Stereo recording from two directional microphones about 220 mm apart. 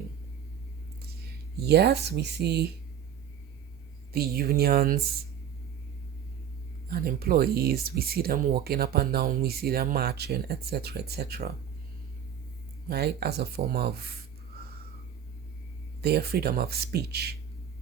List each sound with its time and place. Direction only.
1.5 s speech: 50° right (ahead or behind)
4.1 s speech: 45° right (ahead or behind)
6.9 s speech: 45° right (ahead or behind)
12.9 s speech: 45° right (ahead or behind)
16.0 s speech: 45° right (ahead or behind)